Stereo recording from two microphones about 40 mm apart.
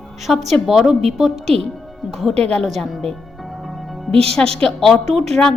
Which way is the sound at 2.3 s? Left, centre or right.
Left.